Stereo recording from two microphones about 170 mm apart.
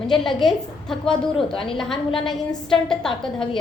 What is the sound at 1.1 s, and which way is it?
Speech, 30° left (ahead or behind).